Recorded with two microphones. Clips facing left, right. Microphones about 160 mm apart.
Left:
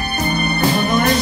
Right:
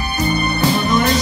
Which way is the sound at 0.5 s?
55° left (ahead or behind).